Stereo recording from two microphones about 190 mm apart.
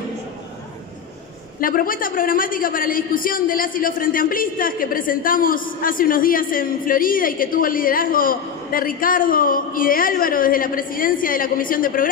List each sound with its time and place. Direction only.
1.6 s a man's voice: 50° left (ahead or behind)